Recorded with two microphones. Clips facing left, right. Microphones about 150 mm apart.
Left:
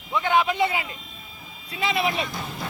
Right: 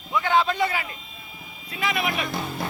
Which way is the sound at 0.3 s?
20° left (ahead or behind).